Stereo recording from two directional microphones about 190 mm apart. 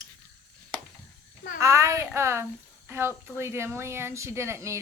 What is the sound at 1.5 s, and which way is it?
Speech, 15° right (ahead or behind).